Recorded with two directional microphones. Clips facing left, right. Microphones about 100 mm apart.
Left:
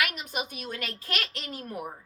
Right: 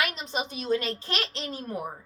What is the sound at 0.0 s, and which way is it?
A woman's voice, 25° right (ahead or behind).